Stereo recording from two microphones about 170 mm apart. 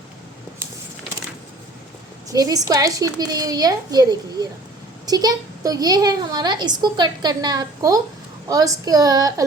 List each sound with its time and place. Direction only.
2.3 s a woman's voice: 20° right (ahead or behind)